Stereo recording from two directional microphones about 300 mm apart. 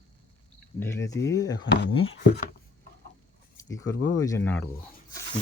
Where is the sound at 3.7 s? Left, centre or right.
Centre.